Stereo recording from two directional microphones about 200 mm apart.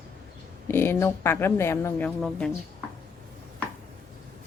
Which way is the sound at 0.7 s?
10° left (ahead or behind).